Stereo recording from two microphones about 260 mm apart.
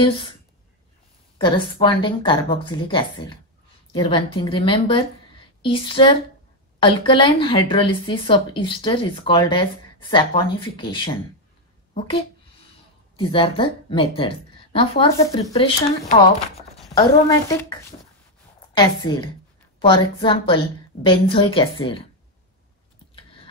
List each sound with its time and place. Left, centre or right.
1.4 s speech: centre
13.2 s a woman's voice: centre
18.8 s a woman's voice: centre
23.1 s a sound: left